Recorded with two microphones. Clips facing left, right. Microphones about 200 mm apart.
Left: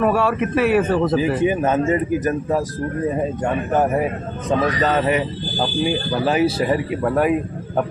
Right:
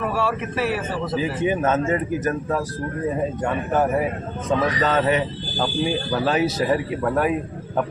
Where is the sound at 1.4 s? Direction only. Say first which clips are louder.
Left 3 dB; 15° left (ahead or behind).